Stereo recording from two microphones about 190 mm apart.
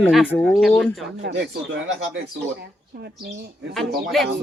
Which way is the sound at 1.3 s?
65° right (ahead or behind).